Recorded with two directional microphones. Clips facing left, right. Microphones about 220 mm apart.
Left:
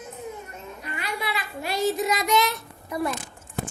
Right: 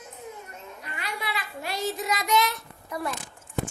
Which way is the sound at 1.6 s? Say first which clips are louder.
Left 6 dB; 15° left (ahead or behind).